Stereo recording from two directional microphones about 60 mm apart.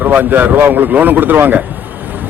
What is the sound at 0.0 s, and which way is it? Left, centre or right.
A man's voice, right.